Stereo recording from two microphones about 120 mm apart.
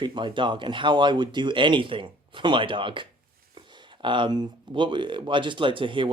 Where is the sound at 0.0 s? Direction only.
40° right (ahead or behind).